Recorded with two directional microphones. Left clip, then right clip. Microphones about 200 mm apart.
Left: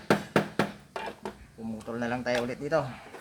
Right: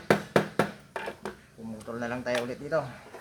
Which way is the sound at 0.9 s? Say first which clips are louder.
Right 1 dB; 10° right (ahead or behind).